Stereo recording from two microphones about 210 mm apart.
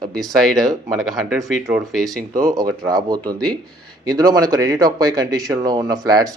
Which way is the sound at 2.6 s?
20° right (ahead or behind).